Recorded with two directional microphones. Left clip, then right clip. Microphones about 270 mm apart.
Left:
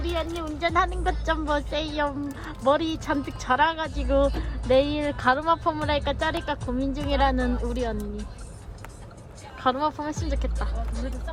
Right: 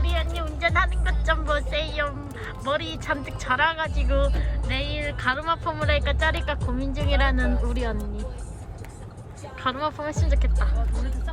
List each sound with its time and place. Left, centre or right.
0.0 s speech: left
9.6 s speech: centre